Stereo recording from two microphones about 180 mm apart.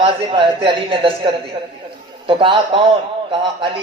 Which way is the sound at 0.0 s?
30° right (ahead or behind).